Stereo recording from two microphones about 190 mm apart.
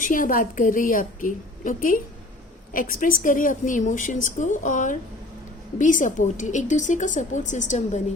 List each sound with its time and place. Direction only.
0.0 s a woman's voice: 45° left (ahead or behind)